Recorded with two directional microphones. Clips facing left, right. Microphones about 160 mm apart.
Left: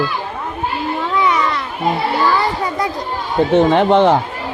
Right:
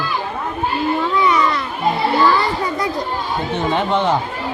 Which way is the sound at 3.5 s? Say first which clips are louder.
Left 8 dB; 90° left.